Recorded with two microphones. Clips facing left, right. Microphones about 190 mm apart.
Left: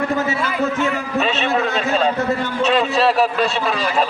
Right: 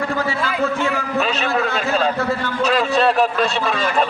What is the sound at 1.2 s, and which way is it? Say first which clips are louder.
Speech: left 2 dB; centre (ahead or behind).